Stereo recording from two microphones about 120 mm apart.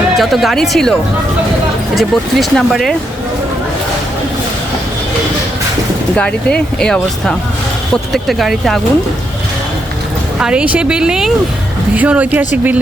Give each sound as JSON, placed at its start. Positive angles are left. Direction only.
{"t": 0.2, "sound": "speech", "side_deg": 0}
{"t": 2.0, "sound": "speech", "side_deg": 0}
{"t": 6.1, "sound": "speech", "side_deg": 10}
{"t": 10.3, "sound": "speech", "side_deg": -5}